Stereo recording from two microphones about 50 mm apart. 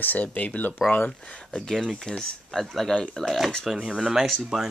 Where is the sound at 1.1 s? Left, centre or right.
Centre.